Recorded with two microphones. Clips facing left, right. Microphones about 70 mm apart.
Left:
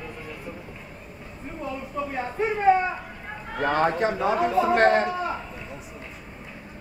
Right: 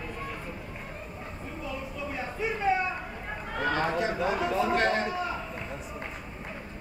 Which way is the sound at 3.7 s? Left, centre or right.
Left.